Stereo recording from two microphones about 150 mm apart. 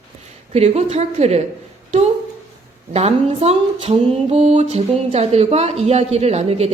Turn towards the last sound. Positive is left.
turn(degrees=-45)  # may be behind; listen again after turning